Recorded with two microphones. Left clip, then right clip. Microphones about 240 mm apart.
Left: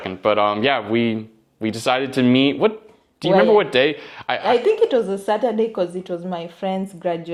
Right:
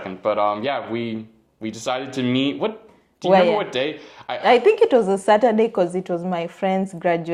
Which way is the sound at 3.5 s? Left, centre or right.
Left.